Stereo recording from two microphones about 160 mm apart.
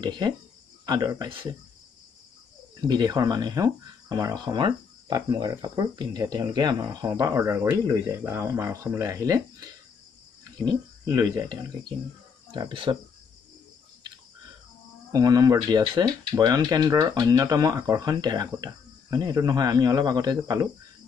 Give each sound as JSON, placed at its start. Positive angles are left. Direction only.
{"t": 0.0, "sound": "speech", "side_deg": -25}
{"t": 2.8, "sound": "speech", "side_deg": -25}
{"t": 11.1, "sound": "speech", "side_deg": -25}
{"t": 15.1, "sound": "speech", "side_deg": -25}